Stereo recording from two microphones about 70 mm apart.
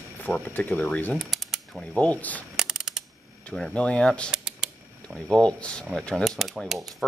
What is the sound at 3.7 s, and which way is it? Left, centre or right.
Speech, centre.